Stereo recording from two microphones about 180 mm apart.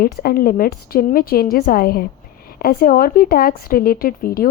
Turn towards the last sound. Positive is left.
turn(degrees=55)  # may be behind; listen again after turning